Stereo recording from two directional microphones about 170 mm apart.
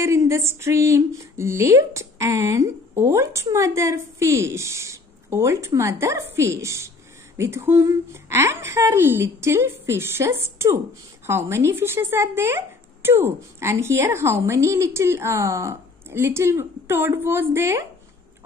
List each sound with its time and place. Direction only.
0.0 s speech: 15° right (ahead or behind)